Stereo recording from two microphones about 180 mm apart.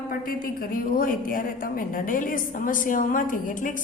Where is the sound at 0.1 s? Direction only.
50° left (ahead or behind).